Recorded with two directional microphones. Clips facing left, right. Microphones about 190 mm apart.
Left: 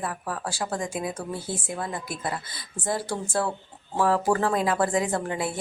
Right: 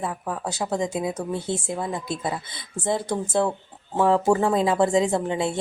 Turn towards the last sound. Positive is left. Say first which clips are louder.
# right 4 dB
turn(degrees=-25)  # may be behind; listen again after turning